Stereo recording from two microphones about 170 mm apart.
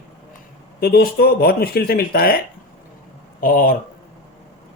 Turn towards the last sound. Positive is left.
turn(degrees=55)  # may be behind; listen again after turning